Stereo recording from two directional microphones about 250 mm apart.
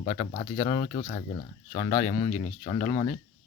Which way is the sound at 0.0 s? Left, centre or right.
Left.